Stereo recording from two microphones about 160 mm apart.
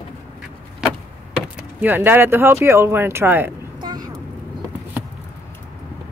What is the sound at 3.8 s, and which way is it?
Vehicle, 25° right (ahead or behind).